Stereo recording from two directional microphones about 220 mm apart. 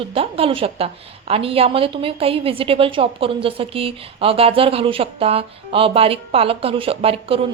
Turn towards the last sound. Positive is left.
turn(degrees=-25)  # may be behind; listen again after turning